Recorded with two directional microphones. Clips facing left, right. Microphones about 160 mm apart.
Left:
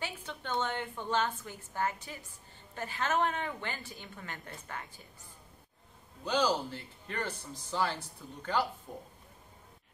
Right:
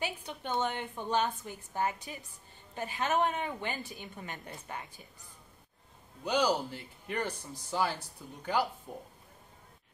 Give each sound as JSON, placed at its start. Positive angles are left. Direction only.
{"t": 0.0, "sound": "a woman's voice", "side_deg": -15}
{"t": 6.2, "sound": "speech", "side_deg": -15}